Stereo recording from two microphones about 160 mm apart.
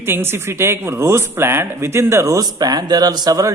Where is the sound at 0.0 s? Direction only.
15° right (ahead or behind).